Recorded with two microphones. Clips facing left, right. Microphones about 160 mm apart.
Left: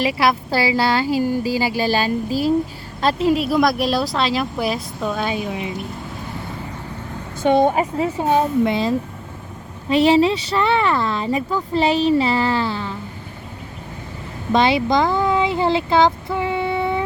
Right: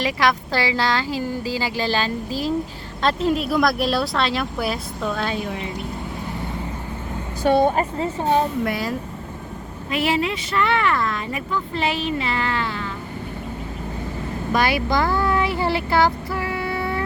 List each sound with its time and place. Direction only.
0.0 s speech: 10° left (ahead or behind)
7.4 s speech: 20° left (ahead or behind)
8.6 s speech: 25° left (ahead or behind)
14.5 s speech: 25° left (ahead or behind)